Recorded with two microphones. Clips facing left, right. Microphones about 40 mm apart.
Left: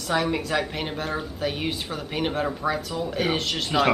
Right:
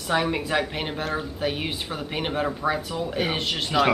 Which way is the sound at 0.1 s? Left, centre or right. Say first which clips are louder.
Right 1 dB; centre.